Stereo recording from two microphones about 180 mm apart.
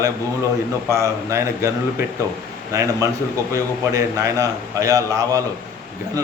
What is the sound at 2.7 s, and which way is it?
A man's voice, 15° right (ahead or behind).